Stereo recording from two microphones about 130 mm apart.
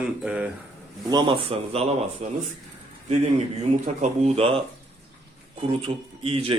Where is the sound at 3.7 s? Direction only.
60° right (ahead or behind).